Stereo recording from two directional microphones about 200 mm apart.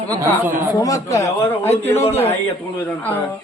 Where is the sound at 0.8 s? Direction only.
15° left (ahead or behind).